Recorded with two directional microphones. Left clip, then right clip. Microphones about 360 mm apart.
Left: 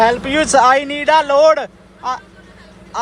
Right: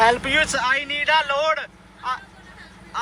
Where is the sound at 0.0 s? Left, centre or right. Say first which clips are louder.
Left 4 dB; centre.